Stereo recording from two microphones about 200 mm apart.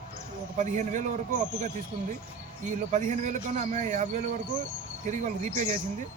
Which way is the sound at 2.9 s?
35° right (ahead or behind).